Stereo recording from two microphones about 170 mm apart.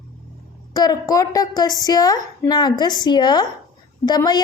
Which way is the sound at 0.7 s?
20° left (ahead or behind).